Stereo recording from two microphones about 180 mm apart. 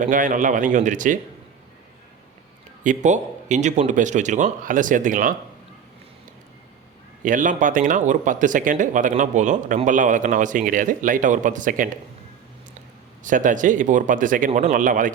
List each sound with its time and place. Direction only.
0.0 s speech: 45° right (ahead or behind)
2.8 s speech: 45° right (ahead or behind)
7.2 s speech: 45° right (ahead or behind)
13.2 s speech: 45° right (ahead or behind)